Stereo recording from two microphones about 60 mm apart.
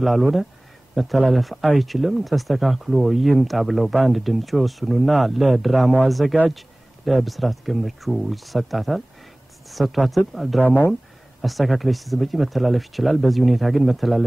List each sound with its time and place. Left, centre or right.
0.0 s speech: centre
10.6 s speech: left
11.4 s speech: centre